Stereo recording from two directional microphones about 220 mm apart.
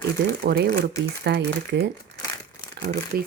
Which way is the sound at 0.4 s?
45° right (ahead or behind).